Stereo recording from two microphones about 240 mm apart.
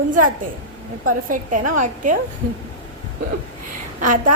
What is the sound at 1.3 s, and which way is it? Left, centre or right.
Speech, right.